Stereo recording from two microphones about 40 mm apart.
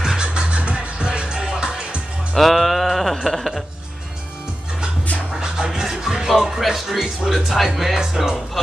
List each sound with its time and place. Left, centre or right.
0.0 s music: centre
0.3 s music: right
2.3 s a sound: centre
3.3 s speech: centre
5.3 s music: centre
6.6 s speech: centre
7.9 s speech: centre